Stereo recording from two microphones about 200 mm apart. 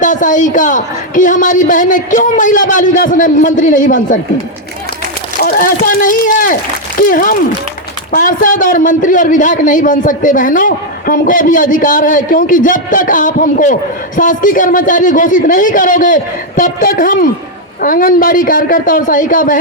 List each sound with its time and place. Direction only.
0.0 s a man's voice: 40° left (ahead or behind)
5.4 s a man's voice: 45° left (ahead or behind)